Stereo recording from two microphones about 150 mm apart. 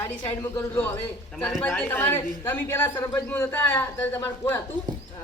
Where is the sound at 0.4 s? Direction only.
10° left (ahead or behind).